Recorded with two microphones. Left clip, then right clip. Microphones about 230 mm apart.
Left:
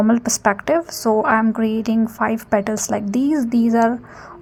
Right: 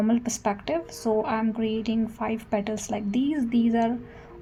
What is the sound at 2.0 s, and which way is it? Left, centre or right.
A woman's voice, left.